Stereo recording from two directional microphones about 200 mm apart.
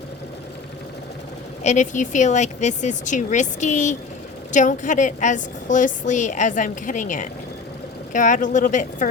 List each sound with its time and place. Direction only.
1.6 s a woman's voice: 35° left (ahead or behind)